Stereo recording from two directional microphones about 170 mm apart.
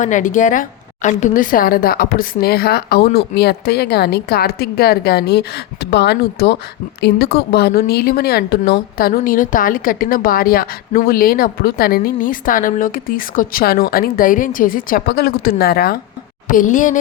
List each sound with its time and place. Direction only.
0.0 s a woman's voice: 50° left (ahead or behind); by 6.6 s 80° left
7.0 s a woman's voice: 70° left (ahead or behind)
15.0 s a woman's voice: 65° left (ahead or behind)
16.5 s speech: 50° left (ahead or behind)